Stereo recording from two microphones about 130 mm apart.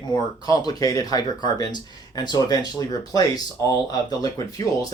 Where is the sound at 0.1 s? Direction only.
30° left (ahead or behind).